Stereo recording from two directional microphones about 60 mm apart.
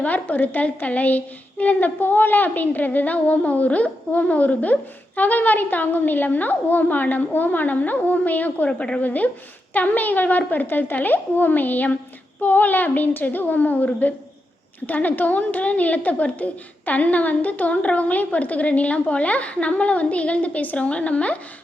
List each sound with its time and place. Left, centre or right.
0.0 s a woman's voice: left